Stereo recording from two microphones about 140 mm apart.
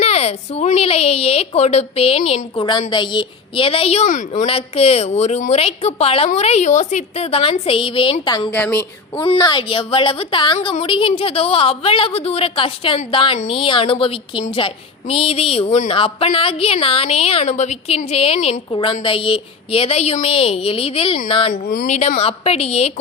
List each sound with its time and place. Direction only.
0.0 s a woman's voice: 50° left (ahead or behind)
8.4 s a woman's voice: 15° left (ahead or behind)
9.1 s a woman's voice: 30° left (ahead or behind)
18.3 s a woman's voice: 60° left (ahead or behind)
18.7 s a woman's voice: 40° left (ahead or behind)
21.5 s speech: 85° left
21.9 s a woman's voice: 50° left (ahead or behind)